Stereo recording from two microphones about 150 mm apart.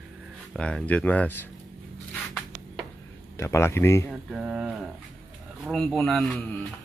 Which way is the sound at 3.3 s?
20° left (ahead or behind).